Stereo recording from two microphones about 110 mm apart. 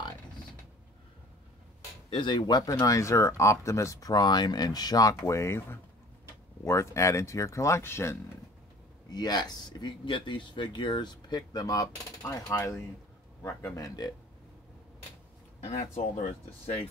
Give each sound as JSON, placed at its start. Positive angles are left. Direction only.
{"t": 2.0, "sound": "speech", "side_deg": 45}
{"t": 9.1, "sound": "speech", "side_deg": 40}
{"t": 15.6, "sound": "speech", "side_deg": 70}